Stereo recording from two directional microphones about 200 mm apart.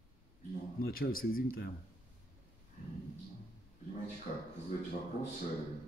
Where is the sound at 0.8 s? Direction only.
50° left (ahead or behind).